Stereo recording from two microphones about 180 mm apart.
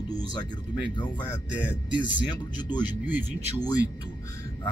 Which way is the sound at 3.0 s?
10° right (ahead or behind).